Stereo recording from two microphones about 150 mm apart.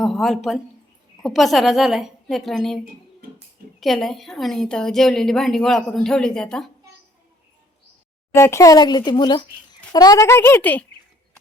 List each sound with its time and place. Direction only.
0.0 s a woman's voice: centre (ahead or behind)
8.3 s speech: 20° left (ahead or behind)